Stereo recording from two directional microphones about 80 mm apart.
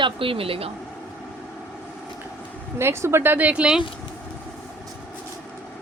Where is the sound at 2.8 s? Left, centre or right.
Right; by 3.8 s centre.